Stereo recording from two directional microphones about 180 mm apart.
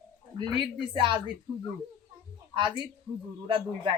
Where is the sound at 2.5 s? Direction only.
25° right (ahead or behind).